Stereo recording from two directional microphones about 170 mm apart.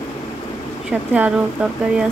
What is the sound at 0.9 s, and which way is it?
Speech, 5° right (ahead or behind).